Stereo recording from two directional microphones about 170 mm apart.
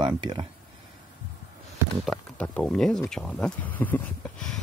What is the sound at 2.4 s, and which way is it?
Speech, 5° left (ahead or behind).